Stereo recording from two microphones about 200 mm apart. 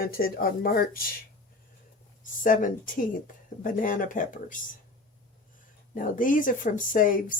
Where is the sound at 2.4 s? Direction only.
40° left (ahead or behind).